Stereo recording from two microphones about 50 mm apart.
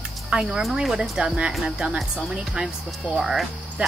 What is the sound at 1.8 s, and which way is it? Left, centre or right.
Speech, centre.